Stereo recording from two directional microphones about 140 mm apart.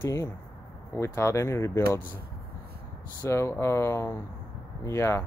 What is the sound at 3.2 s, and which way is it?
Speech, 20° left (ahead or behind).